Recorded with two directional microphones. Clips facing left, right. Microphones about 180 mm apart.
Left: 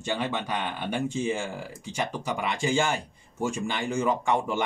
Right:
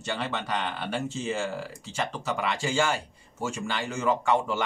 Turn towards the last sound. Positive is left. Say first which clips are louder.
# right 1 dB
turn(degrees=15)  # may be behind; listen again after turning